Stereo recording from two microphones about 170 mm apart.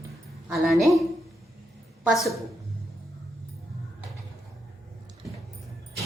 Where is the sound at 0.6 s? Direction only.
Centre (ahead or behind).